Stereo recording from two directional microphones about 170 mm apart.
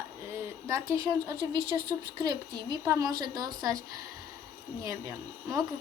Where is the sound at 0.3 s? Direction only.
15° right (ahead or behind).